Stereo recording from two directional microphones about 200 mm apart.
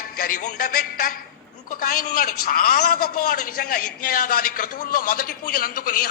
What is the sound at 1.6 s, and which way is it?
A man's voice, 45° left (ahead or behind).